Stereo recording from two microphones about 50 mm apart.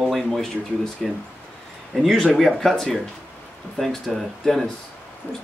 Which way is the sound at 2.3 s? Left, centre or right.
Centre.